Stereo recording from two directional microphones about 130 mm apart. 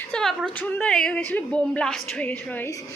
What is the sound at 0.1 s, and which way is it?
A woman's voice, 5° left (ahead or behind).